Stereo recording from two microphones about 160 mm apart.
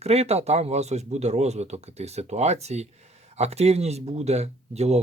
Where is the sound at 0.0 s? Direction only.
40° right (ahead or behind).